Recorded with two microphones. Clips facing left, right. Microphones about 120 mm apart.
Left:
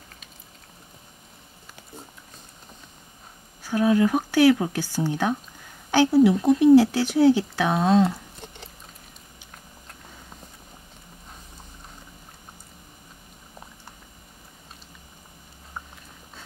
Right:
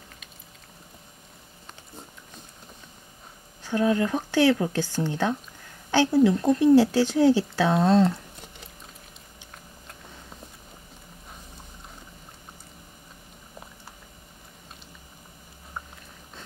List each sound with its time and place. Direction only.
3.6 s speech: 10° left (ahead or behind)